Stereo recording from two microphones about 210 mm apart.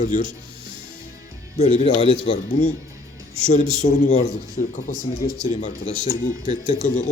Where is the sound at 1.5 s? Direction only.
30° left (ahead or behind).